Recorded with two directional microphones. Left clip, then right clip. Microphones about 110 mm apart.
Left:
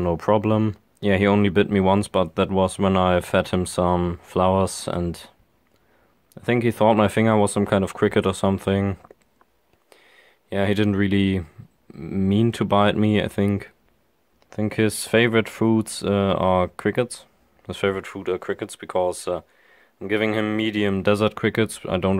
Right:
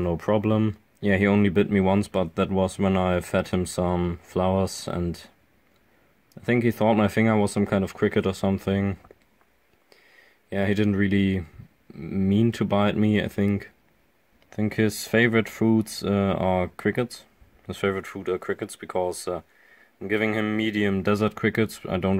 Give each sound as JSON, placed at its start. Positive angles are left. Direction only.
{"t": 0.0, "sound": "speech", "side_deg": 25}
{"t": 6.3, "sound": "speech", "side_deg": 25}